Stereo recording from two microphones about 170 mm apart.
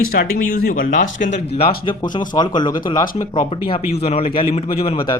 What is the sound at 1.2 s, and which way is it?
Speech, 45° left (ahead or behind).